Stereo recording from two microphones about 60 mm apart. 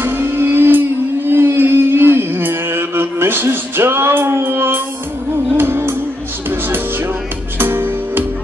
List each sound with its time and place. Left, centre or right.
0.0 s music: right
7.5 s music: right